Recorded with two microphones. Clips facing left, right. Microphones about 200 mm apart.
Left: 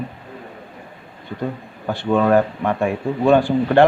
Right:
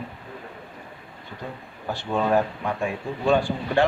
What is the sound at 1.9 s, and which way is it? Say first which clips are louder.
Speech: left 7 dB; 65° left (ahead or behind).